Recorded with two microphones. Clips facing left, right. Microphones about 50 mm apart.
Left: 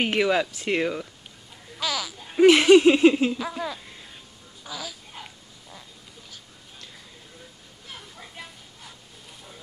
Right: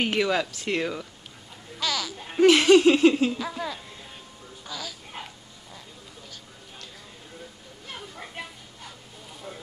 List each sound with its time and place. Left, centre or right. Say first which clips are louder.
0.0 s speech: left 2 dB; centre
0.5 s laughter: left 2 dB; left
1.8 s speech: even; centre
2.4 s laughter: left 2 dB; left
3.3 s speech: left 1 dB; centre